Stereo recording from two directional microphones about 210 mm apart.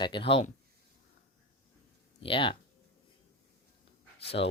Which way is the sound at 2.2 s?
25° left (ahead or behind).